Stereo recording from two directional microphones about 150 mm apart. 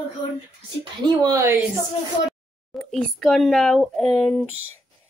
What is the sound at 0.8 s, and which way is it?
Speech, 30° right (ahead or behind).